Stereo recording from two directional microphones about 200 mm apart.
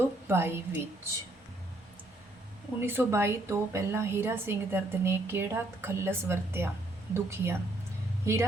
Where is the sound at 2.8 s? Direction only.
10° right (ahead or behind).